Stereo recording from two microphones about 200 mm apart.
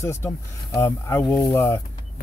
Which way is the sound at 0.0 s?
15° left (ahead or behind).